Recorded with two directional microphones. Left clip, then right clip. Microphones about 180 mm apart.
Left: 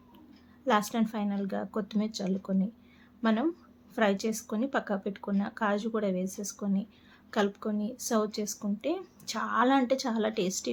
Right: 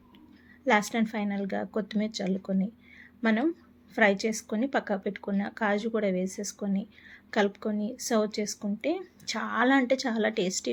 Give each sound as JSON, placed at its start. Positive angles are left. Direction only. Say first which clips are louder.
{"t": 0.6, "sound": "a woman's voice", "louder": "right 2 dB", "side_deg": -5}